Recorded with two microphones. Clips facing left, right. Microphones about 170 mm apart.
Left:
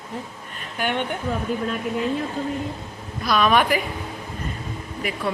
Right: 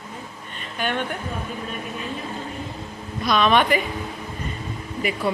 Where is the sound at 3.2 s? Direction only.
5° left (ahead or behind).